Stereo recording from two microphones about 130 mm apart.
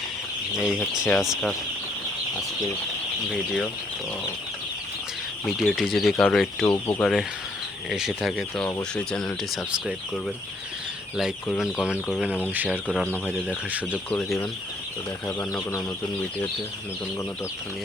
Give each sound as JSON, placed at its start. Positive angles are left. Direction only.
{"t": 0.5, "sound": "speech", "side_deg": 0}
{"t": 3.3, "sound": "speech", "side_deg": 5}
{"t": 5.5, "sound": "speech", "side_deg": 0}
{"t": 6.7, "sound": "speech", "side_deg": 20}
{"t": 7.0, "sound": "speech", "side_deg": 0}
{"t": 11.5, "sound": "speech", "side_deg": -5}
{"t": 14.1, "sound": "speech", "side_deg": 10}